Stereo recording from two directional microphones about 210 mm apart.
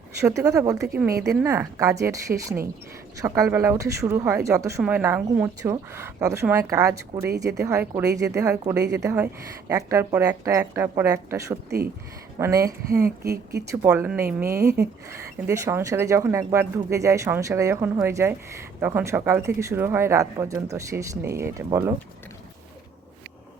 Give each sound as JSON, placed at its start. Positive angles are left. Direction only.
{"t": 0.2, "sound": "speech", "side_deg": -15}